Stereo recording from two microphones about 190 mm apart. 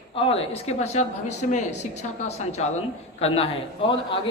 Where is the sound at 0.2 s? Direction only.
30° left (ahead or behind).